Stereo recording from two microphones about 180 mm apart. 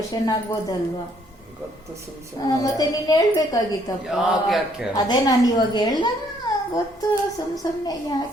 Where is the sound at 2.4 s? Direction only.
20° left (ahead or behind).